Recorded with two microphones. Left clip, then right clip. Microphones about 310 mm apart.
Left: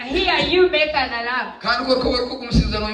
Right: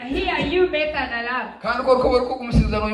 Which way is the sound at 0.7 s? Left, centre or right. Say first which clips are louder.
Left 4 dB; centre.